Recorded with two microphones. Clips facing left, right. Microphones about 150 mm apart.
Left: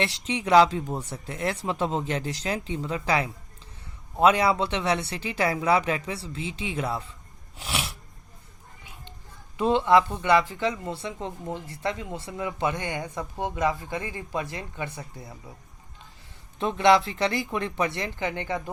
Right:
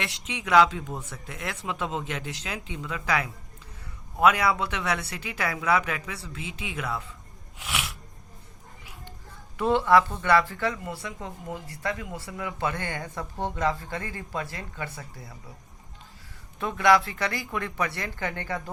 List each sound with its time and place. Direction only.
0.0 s speech: 30° left (ahead or behind)
7.6 s sneeze: 30° left (ahead or behind)
9.6 s speech: 20° left (ahead or behind)
16.6 s speech: 25° left (ahead or behind)